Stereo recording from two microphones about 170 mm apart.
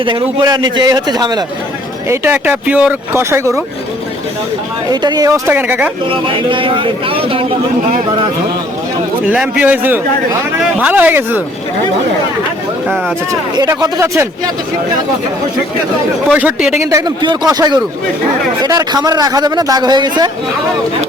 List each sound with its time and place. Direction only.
0.0 s a man's voice: 30° right (ahead or behind)
2.0 s speech: 10° right (ahead or behind)
4.9 s speech: 25° right (ahead or behind)
6.1 s a man's voice: 30° right (ahead or behind)
9.3 s speech: 10° right (ahead or behind)
13.6 s a man's voice: 20° right (ahead or behind)
16.3 s speech: 10° right (ahead or behind)
16.8 s a man's voice: 20° right (ahead or behind)